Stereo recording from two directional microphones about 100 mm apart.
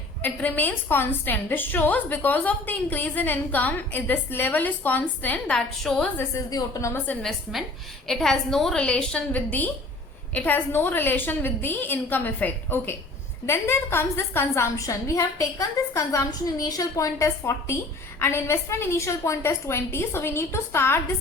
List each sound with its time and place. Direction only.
0.2 s a woman's voice: 15° left (ahead or behind)
5.5 s a woman's voice: 5° left (ahead or behind)
6.5 s a woman's voice: 35° left (ahead or behind)
7.2 s a woman's voice: centre (ahead or behind); by 17.1 s 40° left (ahead or behind)
17.2 s a woman's voice: 30° left (ahead or behind)